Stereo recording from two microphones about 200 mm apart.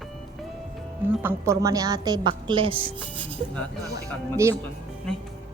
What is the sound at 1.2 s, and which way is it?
A woman's voice, 15° right (ahead or behind).